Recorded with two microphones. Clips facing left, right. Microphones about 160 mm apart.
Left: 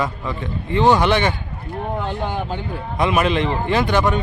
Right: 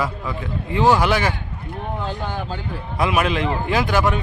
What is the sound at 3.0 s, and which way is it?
A man's voice, centre (ahead or behind).